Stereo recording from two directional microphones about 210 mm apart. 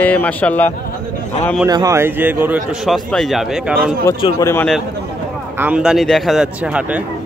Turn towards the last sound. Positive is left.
turn(degrees=-5)  # may be behind; listen again after turning